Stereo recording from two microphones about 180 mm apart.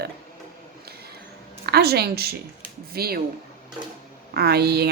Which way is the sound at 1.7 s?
65° right (ahead or behind).